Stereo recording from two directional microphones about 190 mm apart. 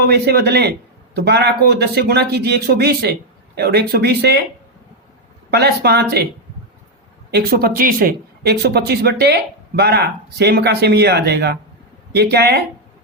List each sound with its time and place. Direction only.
0.0 s speech: 60° right (ahead or behind)
5.5 s speech: 60° right (ahead or behind)
7.3 s speech: 55° right (ahead or behind)